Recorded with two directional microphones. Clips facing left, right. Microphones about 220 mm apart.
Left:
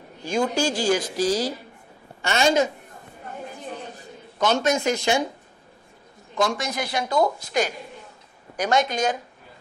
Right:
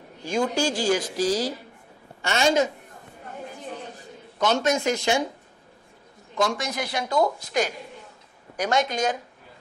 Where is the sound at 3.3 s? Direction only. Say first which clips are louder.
Left 1 dB; 15° left (ahead or behind).